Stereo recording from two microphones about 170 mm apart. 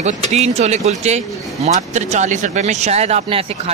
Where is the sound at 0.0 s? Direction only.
40° right (ahead or behind).